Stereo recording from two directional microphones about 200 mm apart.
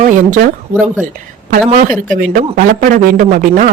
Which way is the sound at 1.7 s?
40° right (ahead or behind).